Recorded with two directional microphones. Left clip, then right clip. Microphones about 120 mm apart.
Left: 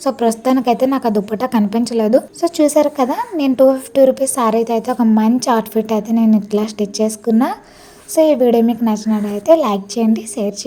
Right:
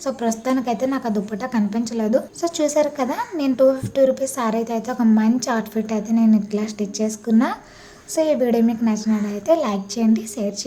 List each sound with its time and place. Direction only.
0.0 s a woman's voice: 50° left (ahead or behind)